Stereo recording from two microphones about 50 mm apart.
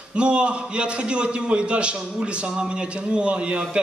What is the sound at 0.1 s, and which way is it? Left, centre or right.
A man's voice, right.